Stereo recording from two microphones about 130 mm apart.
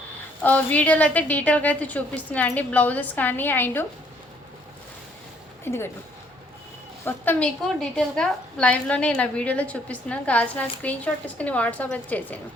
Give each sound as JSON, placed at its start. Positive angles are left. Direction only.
{"t": 0.4, "sound": "a woman's voice", "side_deg": 10}
{"t": 5.6, "sound": "speech", "side_deg": 20}
{"t": 7.0, "sound": "a woman's voice", "side_deg": 10}